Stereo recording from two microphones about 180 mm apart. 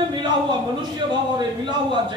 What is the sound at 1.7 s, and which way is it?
Speech, 25° right (ahead or behind).